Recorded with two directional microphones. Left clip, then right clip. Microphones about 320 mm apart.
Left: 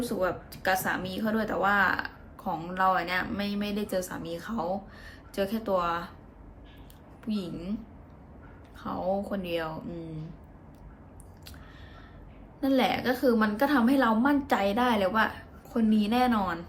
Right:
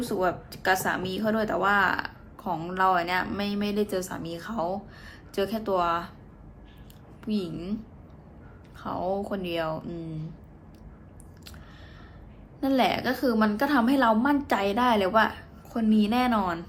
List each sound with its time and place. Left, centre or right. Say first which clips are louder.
0.0 s a woman's voice: right 2 dB; centre
7.3 s a woman's voice: right 3 dB; centre
8.8 s a woman's voice: right 1 dB; centre
12.5 s a woman's voice: right 2 dB; centre